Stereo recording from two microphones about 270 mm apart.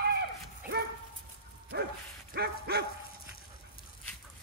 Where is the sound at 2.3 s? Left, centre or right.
Right.